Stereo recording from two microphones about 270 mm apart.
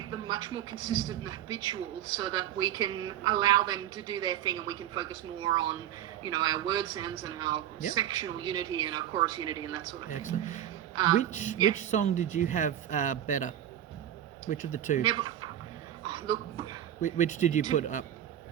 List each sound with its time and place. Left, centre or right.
0.1 s speech: centre
11.3 s speech: left
14.5 s speech: left
15.0 s speech: centre
17.0 s speech: left